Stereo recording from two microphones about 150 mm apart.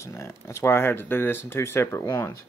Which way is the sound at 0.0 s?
20° left (ahead or behind).